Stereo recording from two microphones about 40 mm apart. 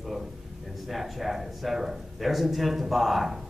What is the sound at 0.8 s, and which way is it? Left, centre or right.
A man's voice, centre.